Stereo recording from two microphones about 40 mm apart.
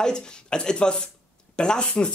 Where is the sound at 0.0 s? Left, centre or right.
Centre.